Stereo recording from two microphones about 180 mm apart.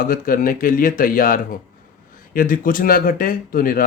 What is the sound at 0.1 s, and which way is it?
Speech, 50° left (ahead or behind).